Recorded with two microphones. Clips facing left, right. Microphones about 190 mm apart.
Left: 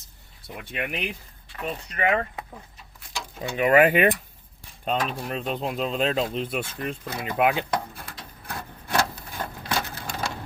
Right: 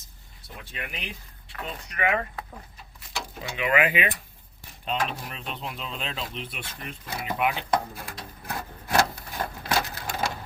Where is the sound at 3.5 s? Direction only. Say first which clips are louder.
Left 6 dB; 45° left (ahead or behind).